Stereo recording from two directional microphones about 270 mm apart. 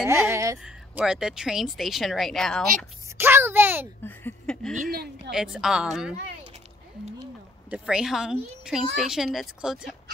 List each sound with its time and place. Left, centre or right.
0.0 s speech: centre
4.0 s speech: centre
4.9 s speech: right
5.3 s speech: centre
7.7 s speech: centre